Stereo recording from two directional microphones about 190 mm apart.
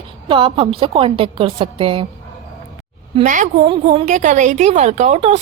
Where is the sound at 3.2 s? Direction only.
40° right (ahead or behind).